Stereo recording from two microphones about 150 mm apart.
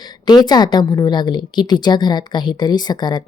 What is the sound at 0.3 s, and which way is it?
A woman's voice, 30° left (ahead or behind).